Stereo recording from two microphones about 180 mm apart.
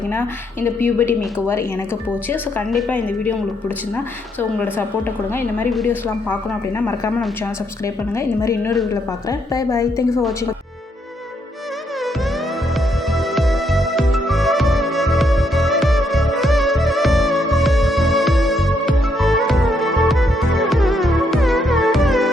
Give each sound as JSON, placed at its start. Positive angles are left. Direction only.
{"t": 0.1, "sound": "speech", "side_deg": 10}
{"t": 2.3, "sound": "speech", "side_deg": 5}
{"t": 8.1, "sound": "speech", "side_deg": 15}
{"t": 13.1, "sound": "music", "side_deg": 0}